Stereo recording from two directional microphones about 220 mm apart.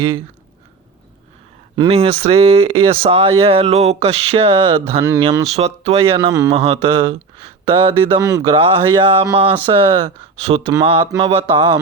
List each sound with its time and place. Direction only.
1.7 s speech: 20° right (ahead or behind)
5.5 s speech: 30° right (ahead or behind)